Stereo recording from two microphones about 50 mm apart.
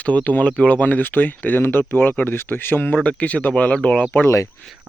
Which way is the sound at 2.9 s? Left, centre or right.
Left.